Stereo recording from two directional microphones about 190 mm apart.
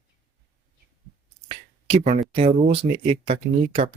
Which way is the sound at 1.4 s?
35° right (ahead or behind).